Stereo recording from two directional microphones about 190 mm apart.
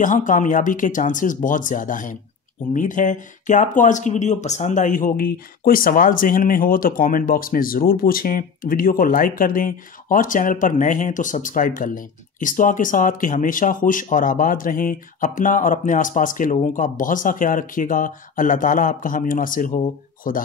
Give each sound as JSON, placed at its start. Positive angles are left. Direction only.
{"t": 0.0, "sound": "speech", "side_deg": 40}